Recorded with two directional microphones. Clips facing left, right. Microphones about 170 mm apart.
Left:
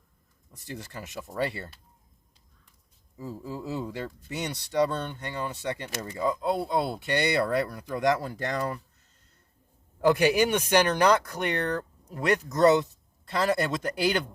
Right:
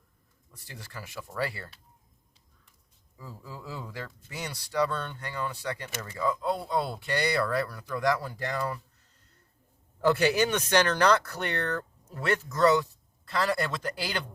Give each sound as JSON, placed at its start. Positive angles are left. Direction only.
{"t": 0.5, "sound": "speech", "side_deg": 20}
{"t": 3.2, "sound": "speech", "side_deg": 25}
{"t": 10.0, "sound": "speech", "side_deg": 15}